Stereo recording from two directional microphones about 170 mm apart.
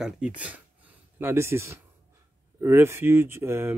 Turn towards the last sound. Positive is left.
turn(degrees=-15)  # may be behind; listen again after turning